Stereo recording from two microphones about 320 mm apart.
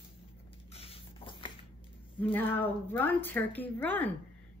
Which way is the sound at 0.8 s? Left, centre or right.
Centre.